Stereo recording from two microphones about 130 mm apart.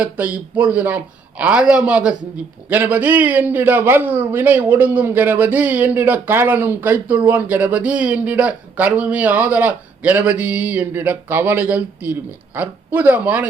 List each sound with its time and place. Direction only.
0.0 s speech: 15° right (ahead or behind)